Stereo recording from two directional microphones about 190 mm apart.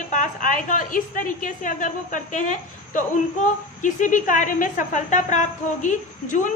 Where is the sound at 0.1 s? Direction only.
45° left (ahead or behind).